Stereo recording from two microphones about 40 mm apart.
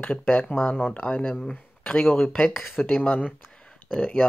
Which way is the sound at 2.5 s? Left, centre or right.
Centre.